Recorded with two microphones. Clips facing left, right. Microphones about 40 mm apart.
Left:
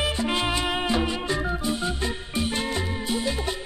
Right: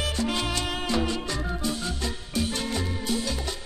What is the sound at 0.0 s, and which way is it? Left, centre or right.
Music, left.